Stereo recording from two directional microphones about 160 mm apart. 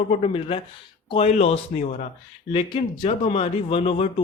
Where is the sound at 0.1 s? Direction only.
35° left (ahead or behind).